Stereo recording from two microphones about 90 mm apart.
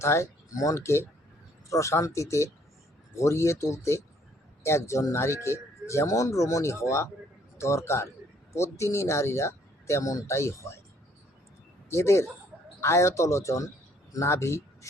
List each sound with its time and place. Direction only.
0.0 s speech: 30° left (ahead or behind)
11.9 s speech: 30° left (ahead or behind)